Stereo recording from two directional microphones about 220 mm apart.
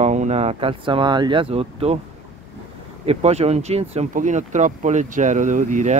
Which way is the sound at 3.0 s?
30° right (ahead or behind).